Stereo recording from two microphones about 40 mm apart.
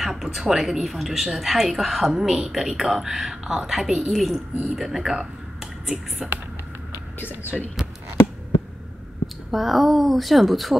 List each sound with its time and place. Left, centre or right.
0.0 s a woman's voice: centre
2.1 s speech: centre
4.1 s a woman's voice: centre
7.2 s speech: left
9.5 s a woman's voice: centre